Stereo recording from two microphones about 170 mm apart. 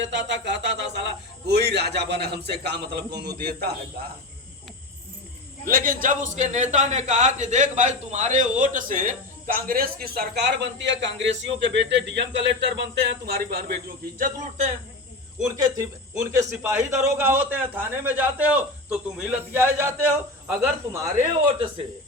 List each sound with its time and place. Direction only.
0.0 s a sound: 90° right
1.5 s a man's voice: 75° right (ahead or behind)
5.6 s a man's voice: 55° right (ahead or behind)
15.4 s a man's voice: 20° right (ahead or behind)